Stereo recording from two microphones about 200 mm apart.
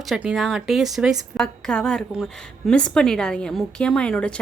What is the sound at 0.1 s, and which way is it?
A woman's voice, centre (ahead or behind).